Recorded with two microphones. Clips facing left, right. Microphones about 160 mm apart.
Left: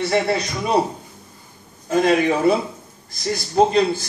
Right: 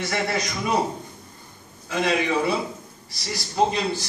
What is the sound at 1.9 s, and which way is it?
A man's voice, 45° left (ahead or behind).